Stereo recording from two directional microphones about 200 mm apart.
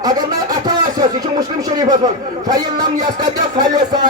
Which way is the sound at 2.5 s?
20° right (ahead or behind).